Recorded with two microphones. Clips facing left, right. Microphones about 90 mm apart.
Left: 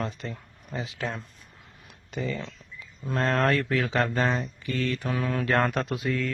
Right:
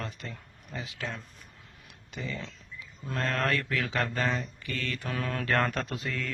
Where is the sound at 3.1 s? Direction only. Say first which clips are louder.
Left 5 dB; 30° left (ahead or behind).